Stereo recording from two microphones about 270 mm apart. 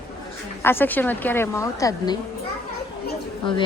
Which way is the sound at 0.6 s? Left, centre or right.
Centre.